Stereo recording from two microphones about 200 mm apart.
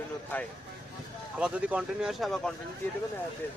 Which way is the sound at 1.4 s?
5° right (ahead or behind).